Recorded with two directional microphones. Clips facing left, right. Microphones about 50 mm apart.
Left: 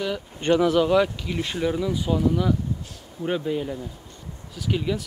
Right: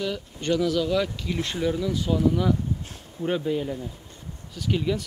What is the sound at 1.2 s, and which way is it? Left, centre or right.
Speech, centre.